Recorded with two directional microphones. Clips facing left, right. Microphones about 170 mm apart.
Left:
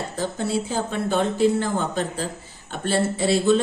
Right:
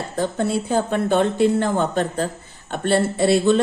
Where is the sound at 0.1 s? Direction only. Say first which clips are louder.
Right 5 dB; 55° right (ahead or behind).